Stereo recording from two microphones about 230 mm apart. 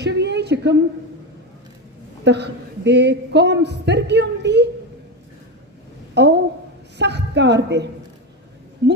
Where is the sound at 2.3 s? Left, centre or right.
Right.